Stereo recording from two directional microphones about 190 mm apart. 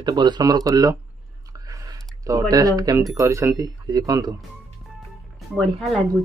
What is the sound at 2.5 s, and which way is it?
Speech, 20° right (ahead or behind).